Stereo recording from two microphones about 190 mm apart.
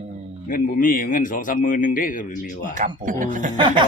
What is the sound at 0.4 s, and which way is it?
A man's voice, 45° left (ahead or behind).